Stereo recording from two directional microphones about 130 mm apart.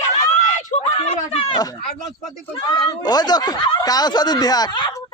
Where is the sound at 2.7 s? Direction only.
30° left (ahead or behind).